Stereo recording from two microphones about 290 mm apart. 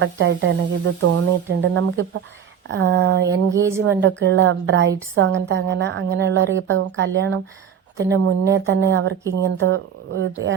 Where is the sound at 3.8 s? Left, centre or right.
Right.